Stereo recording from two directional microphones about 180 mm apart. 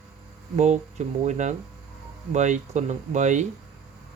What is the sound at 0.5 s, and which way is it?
Speech, 40° right (ahead or behind).